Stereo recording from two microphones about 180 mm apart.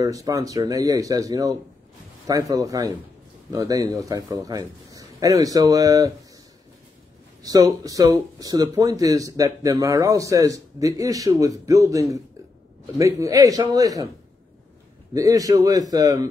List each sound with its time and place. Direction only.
0.0 s speech: 20° right (ahead or behind)
7.4 s speech: 20° right (ahead or behind)
15.1 s speech: 20° right (ahead or behind)